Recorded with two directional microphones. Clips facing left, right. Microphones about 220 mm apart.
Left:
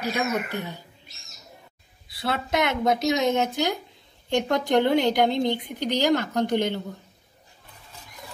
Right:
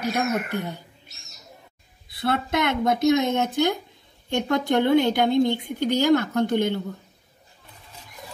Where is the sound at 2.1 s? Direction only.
55° right (ahead or behind).